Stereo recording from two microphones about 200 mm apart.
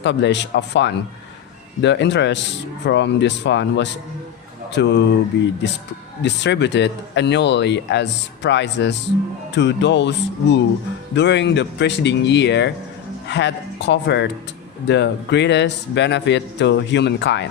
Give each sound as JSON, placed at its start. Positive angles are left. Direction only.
{"t": 0.0, "sound": "speech", "side_deg": 60}